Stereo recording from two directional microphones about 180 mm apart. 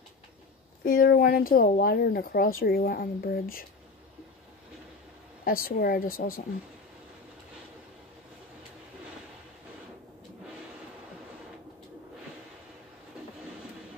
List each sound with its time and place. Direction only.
0.8 s speech: 55° left (ahead or behind)
5.4 s speech: 55° left (ahead or behind)